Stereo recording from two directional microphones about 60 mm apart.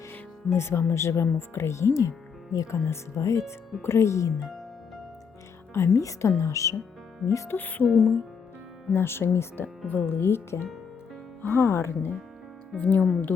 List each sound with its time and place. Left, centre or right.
0.5 s speech: left
2.7 s speech: left
5.7 s speech: left
7.5 s speech: left
8.9 s speech: left
9.8 s speech: left
10.2 s speech: left
12.7 s speech: left